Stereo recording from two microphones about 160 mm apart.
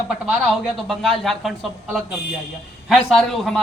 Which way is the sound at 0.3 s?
Centre (ahead or behind).